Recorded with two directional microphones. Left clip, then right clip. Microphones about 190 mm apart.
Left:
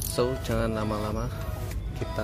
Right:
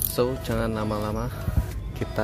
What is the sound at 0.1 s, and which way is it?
Speech, 10° right (ahead or behind).